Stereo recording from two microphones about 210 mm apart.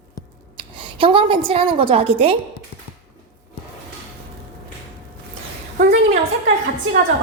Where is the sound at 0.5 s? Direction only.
25° right (ahead or behind).